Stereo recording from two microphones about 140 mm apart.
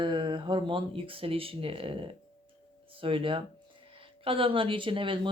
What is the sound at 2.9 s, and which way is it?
Speech, 40° right (ahead or behind).